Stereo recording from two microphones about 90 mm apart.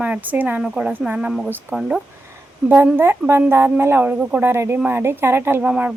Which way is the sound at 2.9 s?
25° right (ahead or behind).